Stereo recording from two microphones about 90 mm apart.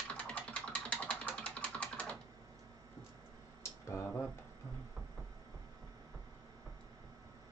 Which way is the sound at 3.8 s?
30° left (ahead or behind).